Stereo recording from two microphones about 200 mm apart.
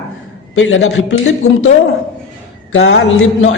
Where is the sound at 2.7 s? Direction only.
70° left (ahead or behind).